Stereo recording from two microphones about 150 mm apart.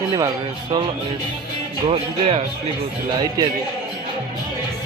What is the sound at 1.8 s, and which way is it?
Speech, 40° right (ahead or behind).